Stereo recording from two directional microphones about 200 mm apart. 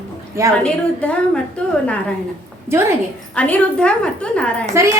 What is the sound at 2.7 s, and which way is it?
Speech, 15° right (ahead or behind).